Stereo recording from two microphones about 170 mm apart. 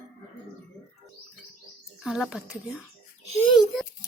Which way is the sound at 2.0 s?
5° right (ahead or behind).